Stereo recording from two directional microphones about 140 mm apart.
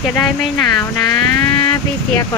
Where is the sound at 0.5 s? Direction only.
25° left (ahead or behind).